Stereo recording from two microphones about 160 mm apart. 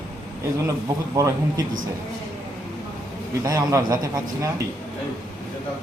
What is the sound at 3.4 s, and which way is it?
A man's voice, 20° right (ahead or behind).